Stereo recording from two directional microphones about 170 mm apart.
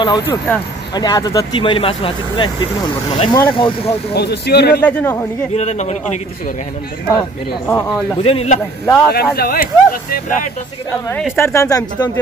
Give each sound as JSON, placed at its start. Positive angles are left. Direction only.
{"t": 0.0, "sound": "speech", "side_deg": 25}
{"t": 4.1, "sound": "speech", "side_deg": 70}
{"t": 4.8, "sound": "speech", "side_deg": 10}
{"t": 5.5, "sound": "a man's voice", "side_deg": 40}
{"t": 7.6, "sound": "speech", "side_deg": 15}
{"t": 8.2, "sound": "a man's voice", "side_deg": 35}
{"t": 8.8, "sound": "speech", "side_deg": 10}
{"t": 9.1, "sound": "speech", "side_deg": 65}
{"t": 10.9, "sound": "speech", "side_deg": 10}